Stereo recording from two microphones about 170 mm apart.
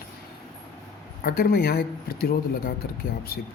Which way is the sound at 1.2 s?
65° left (ahead or behind).